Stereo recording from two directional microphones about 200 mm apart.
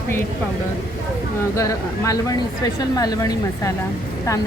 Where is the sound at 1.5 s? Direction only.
15° left (ahead or behind).